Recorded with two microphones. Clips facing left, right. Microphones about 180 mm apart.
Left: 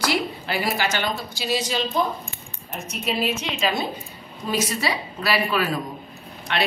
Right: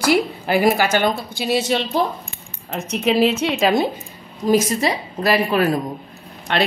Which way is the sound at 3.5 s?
50° right (ahead or behind).